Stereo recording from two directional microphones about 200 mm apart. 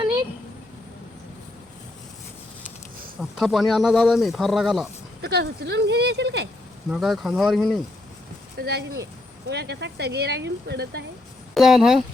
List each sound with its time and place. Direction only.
3.2 s speech: centre (ahead or behind)
5.2 s speech: 55° right (ahead or behind)
6.9 s speech: centre (ahead or behind)
8.5 s speech: 55° right (ahead or behind)
11.5 s speech: centre (ahead or behind)